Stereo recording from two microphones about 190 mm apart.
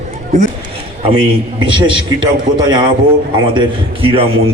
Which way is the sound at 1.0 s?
25° right (ahead or behind).